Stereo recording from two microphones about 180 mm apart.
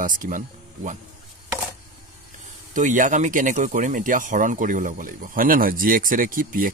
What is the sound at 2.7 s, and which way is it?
Speech, 45° right (ahead or behind).